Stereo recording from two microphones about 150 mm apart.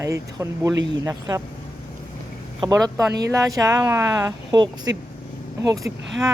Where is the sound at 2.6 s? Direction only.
25° right (ahead or behind).